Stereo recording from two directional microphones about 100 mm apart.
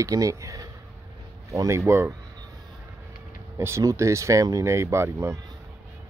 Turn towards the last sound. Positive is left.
turn(degrees=-25)  # may be behind; listen again after turning